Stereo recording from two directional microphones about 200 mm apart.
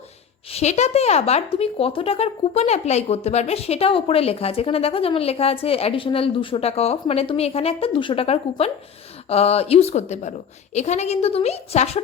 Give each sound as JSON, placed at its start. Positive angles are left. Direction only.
{"t": 0.5, "sound": "a woman's voice", "side_deg": 35}